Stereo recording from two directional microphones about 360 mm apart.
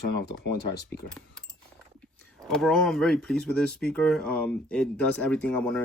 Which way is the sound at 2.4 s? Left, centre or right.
Centre.